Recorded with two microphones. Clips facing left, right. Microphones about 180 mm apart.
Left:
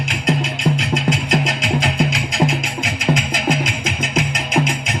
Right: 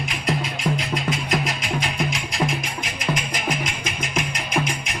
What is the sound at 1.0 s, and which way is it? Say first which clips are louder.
Music: left 5 dB; 90° left.